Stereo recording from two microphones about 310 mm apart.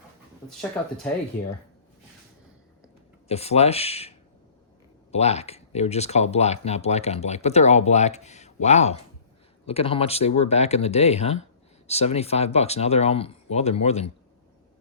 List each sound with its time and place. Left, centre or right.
3.2 s speech: centre
5.1 s speech: left